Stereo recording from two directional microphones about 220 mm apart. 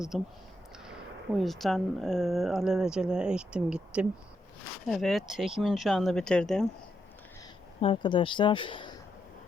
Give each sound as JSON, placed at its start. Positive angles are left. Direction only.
{"t": 0.1, "sound": "speech", "side_deg": 0}
{"t": 7.8, "sound": "speech", "side_deg": 25}